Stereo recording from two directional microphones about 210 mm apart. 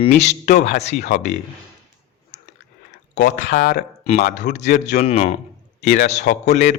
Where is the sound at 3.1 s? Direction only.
55° left (ahead or behind).